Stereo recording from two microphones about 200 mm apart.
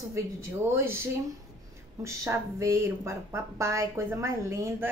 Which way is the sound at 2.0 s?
15° right (ahead or behind).